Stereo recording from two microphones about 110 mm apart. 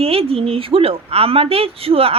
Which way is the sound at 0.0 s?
60° right (ahead or behind).